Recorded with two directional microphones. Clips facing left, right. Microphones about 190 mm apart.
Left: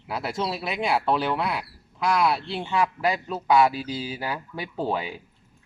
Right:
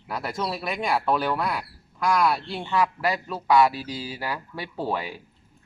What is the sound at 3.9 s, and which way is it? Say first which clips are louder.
Speech: left 2 dB; 25° left (ahead or behind).